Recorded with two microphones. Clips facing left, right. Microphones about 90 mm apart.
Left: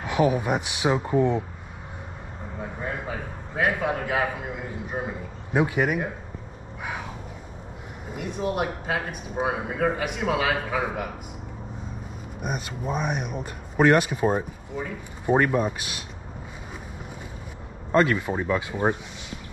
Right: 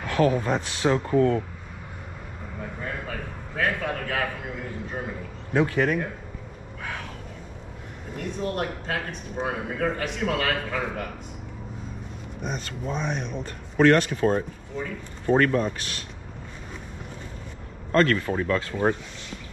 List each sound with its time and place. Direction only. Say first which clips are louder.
0.0 s speech: even; 15° left (ahead or behind)
2.6 s speech: left 2 dB; 15° left (ahead or behind)
8.1 s speech: left 1 dB; 10° left (ahead or behind)
12.4 s speech: left 1 dB; 15° left (ahead or behind)
17.9 s speech: even; 15° left (ahead or behind)